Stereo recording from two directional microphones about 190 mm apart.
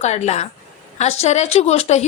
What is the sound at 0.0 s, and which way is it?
A woman's voice, 35° left (ahead or behind).